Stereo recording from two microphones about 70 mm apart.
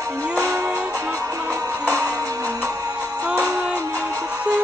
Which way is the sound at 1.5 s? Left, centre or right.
Right.